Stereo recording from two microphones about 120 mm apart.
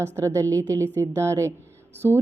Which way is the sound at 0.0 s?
25° right (ahead or behind).